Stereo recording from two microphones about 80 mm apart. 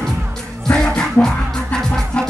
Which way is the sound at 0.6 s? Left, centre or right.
Centre.